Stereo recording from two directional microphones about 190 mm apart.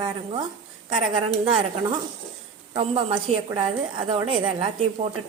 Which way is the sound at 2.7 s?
30° right (ahead or behind).